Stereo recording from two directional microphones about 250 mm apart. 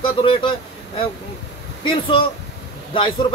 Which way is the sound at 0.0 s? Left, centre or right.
Centre.